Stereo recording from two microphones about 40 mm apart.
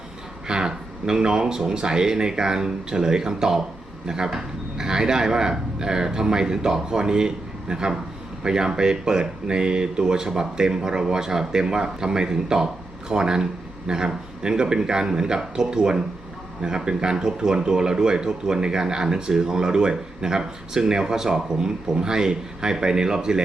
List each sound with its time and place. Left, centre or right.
0.4 s speech: centre